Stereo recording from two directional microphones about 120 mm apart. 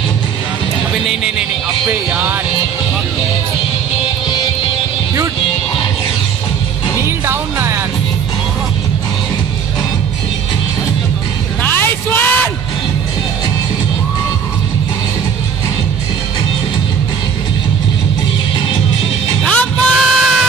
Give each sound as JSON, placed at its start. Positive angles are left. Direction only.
{"t": 1.9, "sound": "music", "side_deg": -15}
{"t": 7.0, "sound": "music", "side_deg": -20}
{"t": 11.6, "sound": "a sound", "side_deg": 15}
{"t": 19.4, "sound": "music", "side_deg": 5}